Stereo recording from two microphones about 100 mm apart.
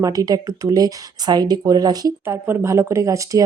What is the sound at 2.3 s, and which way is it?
Speech, 30° right (ahead or behind).